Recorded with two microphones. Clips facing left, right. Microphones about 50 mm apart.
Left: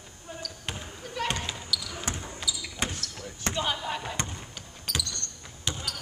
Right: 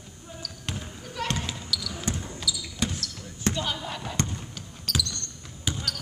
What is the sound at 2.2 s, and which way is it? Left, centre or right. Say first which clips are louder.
Basketball bounce: right 2 dB; left.